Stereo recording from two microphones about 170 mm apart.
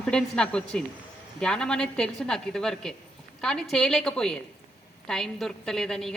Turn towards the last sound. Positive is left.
turn(degrees=0)  # may be behind; listen again after turning